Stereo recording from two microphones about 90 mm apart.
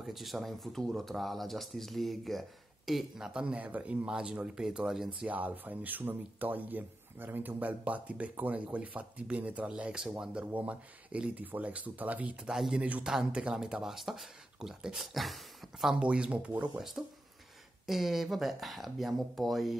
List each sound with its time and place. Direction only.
0.0 s speech: centre (ahead or behind)
5.3 s speech: 20° right (ahead or behind)
12.5 s speech: 5° right (ahead or behind)
12.8 s speech: 15° right (ahead or behind)
17.8 s speech: 5° right (ahead or behind)